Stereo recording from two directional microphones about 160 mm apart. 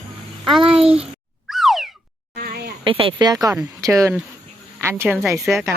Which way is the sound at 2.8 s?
35° right (ahead or behind).